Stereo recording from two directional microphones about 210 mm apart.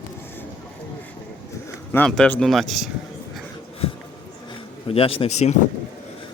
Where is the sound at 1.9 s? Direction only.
5° left (ahead or behind).